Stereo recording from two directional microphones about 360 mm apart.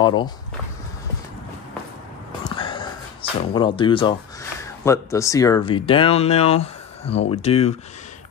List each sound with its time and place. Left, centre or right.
0.0 s speech: centre
2.4 s speech: centre